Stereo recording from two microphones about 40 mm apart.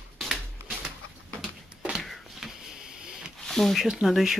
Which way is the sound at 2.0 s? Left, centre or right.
Centre.